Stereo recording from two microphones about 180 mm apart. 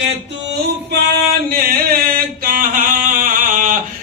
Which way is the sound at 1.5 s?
55° right (ahead or behind).